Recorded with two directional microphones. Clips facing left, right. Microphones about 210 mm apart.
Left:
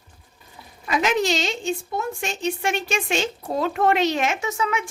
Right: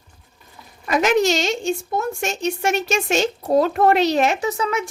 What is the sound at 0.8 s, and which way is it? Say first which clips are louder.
A woman's voice: right 4 dB; 45° right (ahead or behind).